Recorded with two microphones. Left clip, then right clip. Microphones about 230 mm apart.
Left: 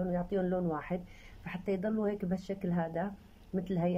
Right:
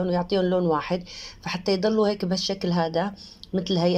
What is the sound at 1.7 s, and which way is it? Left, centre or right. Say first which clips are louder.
Speech: right 12 dB; right.